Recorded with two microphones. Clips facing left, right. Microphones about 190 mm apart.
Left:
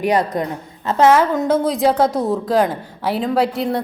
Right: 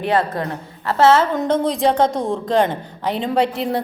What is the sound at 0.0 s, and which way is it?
A woman's voice, 15° left (ahead or behind).